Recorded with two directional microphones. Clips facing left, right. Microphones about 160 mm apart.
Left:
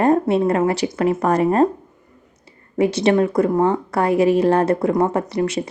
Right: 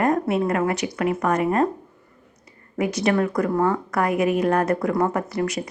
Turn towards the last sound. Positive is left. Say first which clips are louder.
# left 4 dB
turn(degrees=25)  # may be behind; listen again after turning